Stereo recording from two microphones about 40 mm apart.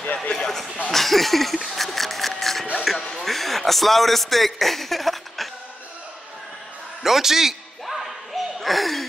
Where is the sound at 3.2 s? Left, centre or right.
Centre.